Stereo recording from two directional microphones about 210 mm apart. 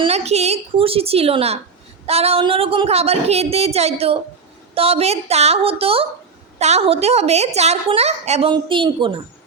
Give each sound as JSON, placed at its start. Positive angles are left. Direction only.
{"t": 0.0, "sound": "a woman's voice", "side_deg": -30}